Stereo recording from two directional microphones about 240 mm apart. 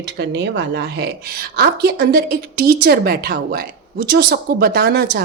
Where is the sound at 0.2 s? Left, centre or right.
Right.